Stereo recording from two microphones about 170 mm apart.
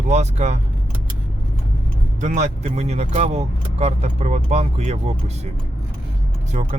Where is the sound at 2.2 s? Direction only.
45° right (ahead or behind).